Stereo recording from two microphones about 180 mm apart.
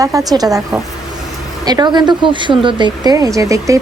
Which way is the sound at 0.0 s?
20° right (ahead or behind).